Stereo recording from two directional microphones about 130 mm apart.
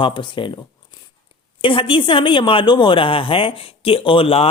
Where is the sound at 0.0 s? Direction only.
40° left (ahead or behind).